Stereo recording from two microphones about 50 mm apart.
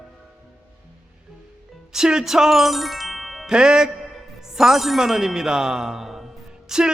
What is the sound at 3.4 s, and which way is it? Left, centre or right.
Speech, centre.